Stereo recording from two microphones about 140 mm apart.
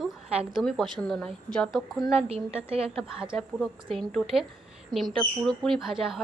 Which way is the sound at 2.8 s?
5° right (ahead or behind).